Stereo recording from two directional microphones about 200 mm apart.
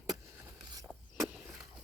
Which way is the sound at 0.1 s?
20° right (ahead or behind).